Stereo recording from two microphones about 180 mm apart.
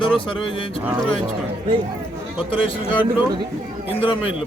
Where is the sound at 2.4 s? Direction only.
30° left (ahead or behind).